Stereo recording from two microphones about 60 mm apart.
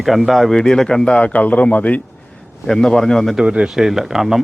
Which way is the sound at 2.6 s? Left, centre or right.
Centre.